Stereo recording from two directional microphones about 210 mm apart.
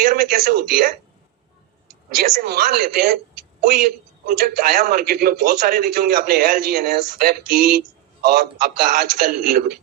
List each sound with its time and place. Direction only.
0.0 s a man's voice: 45° right (ahead or behind)
2.0 s a man's voice: 45° right (ahead or behind)